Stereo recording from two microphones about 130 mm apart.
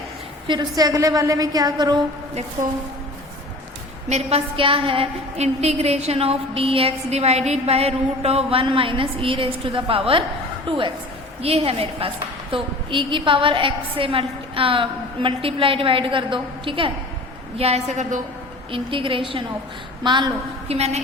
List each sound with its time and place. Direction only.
0.4 s a woman's voice: 35° right (ahead or behind)
4.1 s a woman's voice: 50° right (ahead or behind)
17.6 s a woman's voice: 55° right (ahead or behind)
18.7 s a woman's voice: 40° right (ahead or behind)
20.7 s a woman's voice: 55° right (ahead or behind)